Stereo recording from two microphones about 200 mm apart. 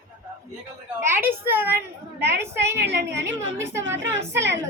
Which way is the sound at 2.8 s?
60° right (ahead or behind).